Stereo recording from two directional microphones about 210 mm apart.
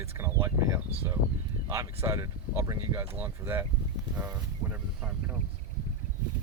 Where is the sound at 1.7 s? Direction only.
15° right (ahead or behind).